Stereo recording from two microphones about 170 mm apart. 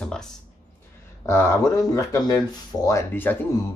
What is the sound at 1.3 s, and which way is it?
Speech, 15° left (ahead or behind).